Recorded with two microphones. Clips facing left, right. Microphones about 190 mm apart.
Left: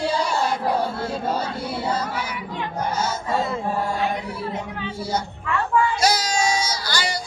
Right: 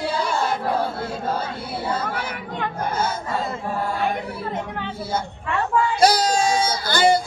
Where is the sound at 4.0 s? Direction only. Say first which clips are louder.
Even; 55° right (ahead or behind).